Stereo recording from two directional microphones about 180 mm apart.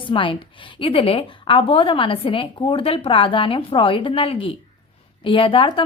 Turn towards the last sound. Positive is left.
turn(degrees=30)  # may be behind; listen again after turning